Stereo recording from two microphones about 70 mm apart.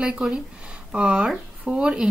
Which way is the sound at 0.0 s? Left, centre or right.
Centre.